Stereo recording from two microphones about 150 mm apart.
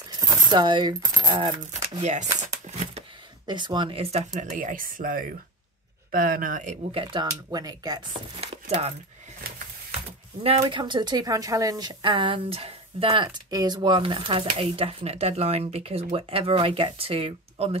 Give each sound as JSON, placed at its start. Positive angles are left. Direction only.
{"t": 0.5, "sound": "coin", "side_deg": -30}
{"t": 1.7, "sound": "speech", "side_deg": -55}
{"t": 2.3, "sound": "crumpling", "side_deg": -55}
{"t": 3.4, "sound": "speech", "side_deg": -30}
{"t": 6.9, "sound": "speech", "side_deg": -35}
{"t": 8.6, "sound": "coin", "side_deg": -45}
{"t": 10.4, "sound": "speech", "side_deg": -40}